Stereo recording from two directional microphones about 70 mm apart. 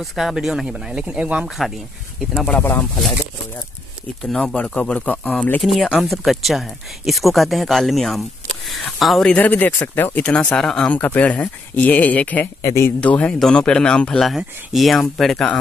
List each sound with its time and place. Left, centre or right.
0.0 s speech: centre
2.6 s speech: left
4.2 s speech: centre
4.6 s speech: left
5.6 s speech: centre
9.4 s speech: left
10.2 s speech: centre
10.9 s speech: left
12.6 s speech: left
13.0 s speech: centre
14.2 s speech: centre